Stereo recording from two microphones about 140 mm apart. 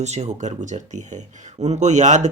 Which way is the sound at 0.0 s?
55° right (ahead or behind).